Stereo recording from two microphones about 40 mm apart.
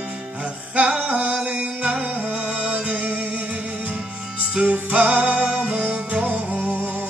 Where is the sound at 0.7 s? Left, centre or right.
Right.